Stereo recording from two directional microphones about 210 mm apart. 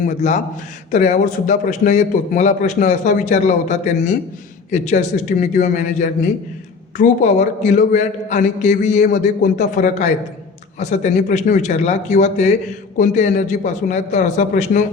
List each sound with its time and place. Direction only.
0.0 s a man's voice: 35° left (ahead or behind)